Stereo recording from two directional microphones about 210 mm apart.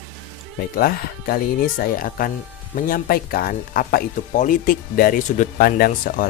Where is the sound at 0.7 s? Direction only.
45° left (ahead or behind).